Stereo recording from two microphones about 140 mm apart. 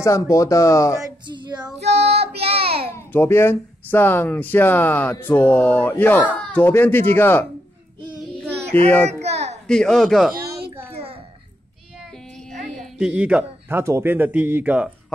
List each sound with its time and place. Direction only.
0.0 s speech: 25° left (ahead or behind)
1.0 s female singing: 30° right (ahead or behind)
1.8 s child singing: 50° right (ahead or behind)
3.1 s speech: 15° left (ahead or behind)
8.8 s speech: 10° left (ahead or behind)
9.2 s a sound: 50° right (ahead or behind)
9.7 s speech: 5° left (ahead or behind)
12.4 s a sound: centre (ahead or behind)
13.1 s a man's voice: 10° right (ahead or behind)